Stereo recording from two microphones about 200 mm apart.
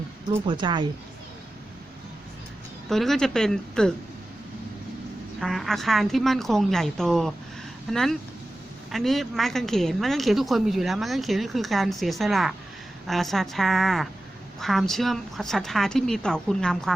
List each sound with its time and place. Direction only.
0.3 s a woman's voice: 20° right (ahead or behind)
2.9 s a woman's voice: centre (ahead or behind)
5.4 s a woman's voice: centre (ahead or behind)